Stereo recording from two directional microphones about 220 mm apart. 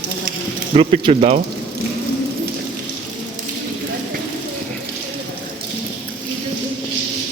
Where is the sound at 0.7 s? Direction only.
30° right (ahead or behind).